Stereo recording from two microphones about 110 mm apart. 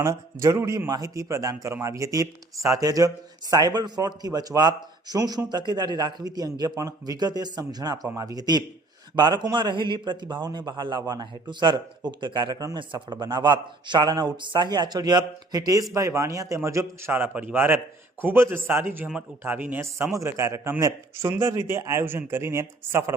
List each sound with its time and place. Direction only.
0.0 s a man's voice: 25° right (ahead or behind)